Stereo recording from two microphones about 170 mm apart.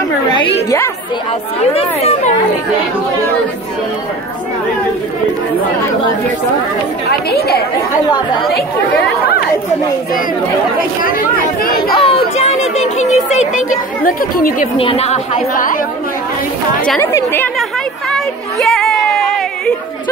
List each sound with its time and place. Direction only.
0.3 s a woman's voice: 25° left (ahead or behind)
7.1 s speech: 70° left (ahead or behind)
11.6 s chatter: 60° left (ahead or behind)
12.0 s a sound: 35° left (ahead or behind)
12.7 s speech: 40° left (ahead or behind)
14.8 s speech: 35° left (ahead or behind)
15.3 s speech: 55° left (ahead or behind)
17.0 s speech: 15° left (ahead or behind)
18.1 s a sound: centre (ahead or behind)